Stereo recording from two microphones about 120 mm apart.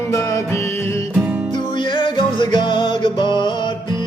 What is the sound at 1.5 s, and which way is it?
Music, 40° left (ahead or behind).